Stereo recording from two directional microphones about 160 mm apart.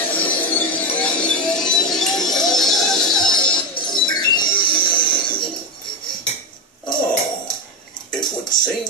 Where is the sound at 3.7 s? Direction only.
30° left (ahead or behind).